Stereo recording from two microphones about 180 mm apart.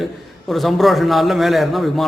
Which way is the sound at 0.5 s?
Centre (ahead or behind).